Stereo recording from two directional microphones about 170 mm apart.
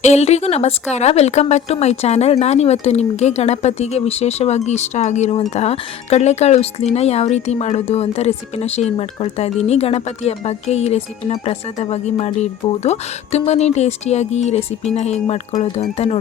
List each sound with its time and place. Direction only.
0.0 s speech: 40° left (ahead or behind)